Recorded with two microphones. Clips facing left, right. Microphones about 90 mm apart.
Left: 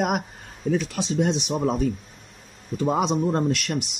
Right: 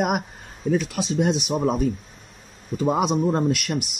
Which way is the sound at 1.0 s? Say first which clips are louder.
Right 1 dB; 10° right (ahead or behind).